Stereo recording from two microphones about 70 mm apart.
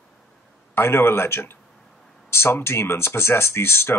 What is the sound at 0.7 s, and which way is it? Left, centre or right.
Speech, left.